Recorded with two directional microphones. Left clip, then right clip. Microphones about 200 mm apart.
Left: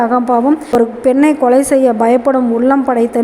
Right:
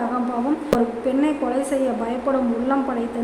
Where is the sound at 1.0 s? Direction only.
40° left (ahead or behind).